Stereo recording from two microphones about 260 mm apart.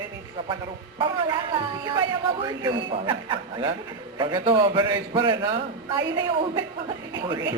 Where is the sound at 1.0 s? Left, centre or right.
Centre.